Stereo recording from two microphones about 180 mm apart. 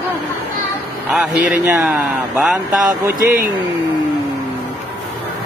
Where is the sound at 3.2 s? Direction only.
50° right (ahead or behind).